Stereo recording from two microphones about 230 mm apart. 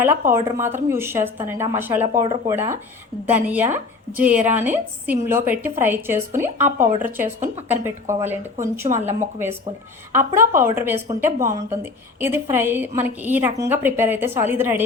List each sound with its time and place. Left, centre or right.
0.0 s a woman's voice: centre
2.2 s speech: right
3.2 s a woman's voice: centre